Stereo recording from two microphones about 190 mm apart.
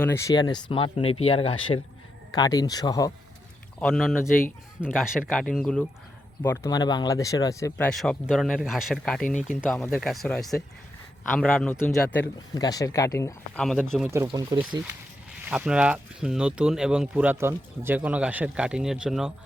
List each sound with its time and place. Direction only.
0.0 s speech: 15° left (ahead or behind); by 1.5 s 30° left (ahead or behind)
2.3 s speech: 20° left (ahead or behind)
3.8 s speech: centre (ahead or behind)
6.4 s speech: 15° left (ahead or behind)
7.8 s a man's voice: 5° left (ahead or behind)
12.5 s a man's voice: 20° left (ahead or behind)
13.6 s speech: 5° left (ahead or behind)
14.3 s speech: 25° right (ahead or behind)
15.4 s speech: 5° right (ahead or behind)